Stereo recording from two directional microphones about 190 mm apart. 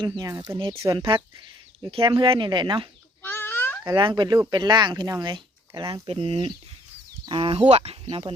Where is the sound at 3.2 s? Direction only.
10° left (ahead or behind).